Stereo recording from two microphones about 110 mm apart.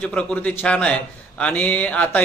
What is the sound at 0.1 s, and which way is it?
A man's voice, 10° left (ahead or behind).